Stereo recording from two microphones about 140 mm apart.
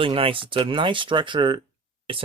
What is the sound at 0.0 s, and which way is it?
Speech, 40° right (ahead or behind).